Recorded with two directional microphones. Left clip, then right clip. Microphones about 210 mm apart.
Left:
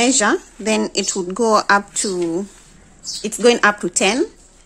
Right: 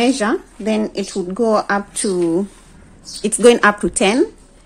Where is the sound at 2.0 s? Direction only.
5° left (ahead or behind).